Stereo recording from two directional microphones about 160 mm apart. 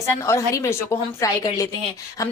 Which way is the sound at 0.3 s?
20° left (ahead or behind).